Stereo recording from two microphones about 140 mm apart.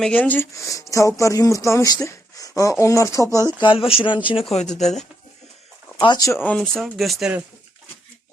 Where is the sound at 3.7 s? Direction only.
40° left (ahead or behind).